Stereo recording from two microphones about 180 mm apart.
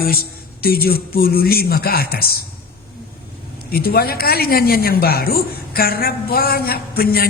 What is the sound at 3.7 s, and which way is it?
A man's voice, 60° left (ahead or behind).